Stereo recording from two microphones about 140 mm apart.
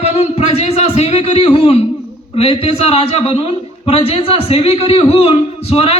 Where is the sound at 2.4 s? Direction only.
45° left (ahead or behind).